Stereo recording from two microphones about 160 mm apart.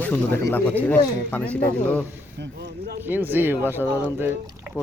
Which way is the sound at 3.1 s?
10° right (ahead or behind).